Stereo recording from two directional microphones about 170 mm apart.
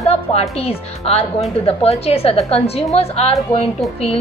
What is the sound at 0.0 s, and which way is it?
A woman's voice, 40° left (ahead or behind).